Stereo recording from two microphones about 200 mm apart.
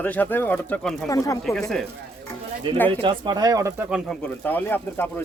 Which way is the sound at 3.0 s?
25° right (ahead or behind).